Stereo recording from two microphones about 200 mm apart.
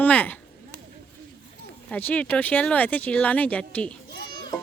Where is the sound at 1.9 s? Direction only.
5° left (ahead or behind).